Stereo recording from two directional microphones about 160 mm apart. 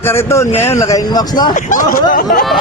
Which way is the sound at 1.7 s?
55° left (ahead or behind).